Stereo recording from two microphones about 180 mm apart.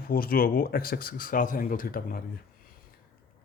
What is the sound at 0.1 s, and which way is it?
Speech, 55° left (ahead or behind).